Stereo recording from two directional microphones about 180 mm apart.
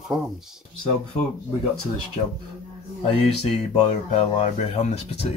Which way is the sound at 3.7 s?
35° left (ahead or behind).